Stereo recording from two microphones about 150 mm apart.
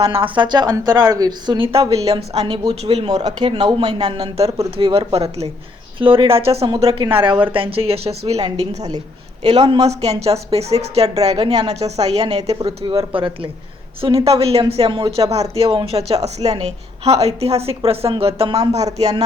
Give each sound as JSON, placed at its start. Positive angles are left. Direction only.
{"t": 0.2, "sound": "a woman's voice", "side_deg": -30}